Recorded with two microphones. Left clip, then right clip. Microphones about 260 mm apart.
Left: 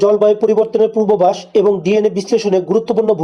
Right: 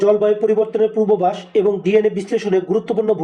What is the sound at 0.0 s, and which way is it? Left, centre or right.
Speech, left.